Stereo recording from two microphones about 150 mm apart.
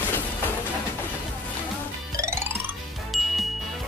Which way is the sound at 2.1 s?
20° right (ahead or behind).